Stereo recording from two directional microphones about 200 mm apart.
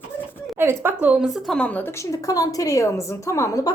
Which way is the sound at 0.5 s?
10° right (ahead or behind).